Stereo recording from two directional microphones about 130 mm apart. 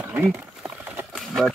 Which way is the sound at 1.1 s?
Centre (ahead or behind).